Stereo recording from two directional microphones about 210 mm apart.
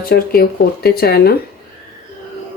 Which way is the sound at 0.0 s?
45° left (ahead or behind).